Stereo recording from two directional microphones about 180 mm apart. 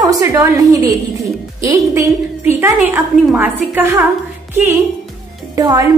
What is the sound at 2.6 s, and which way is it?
A woman's voice, 15° right (ahead or behind).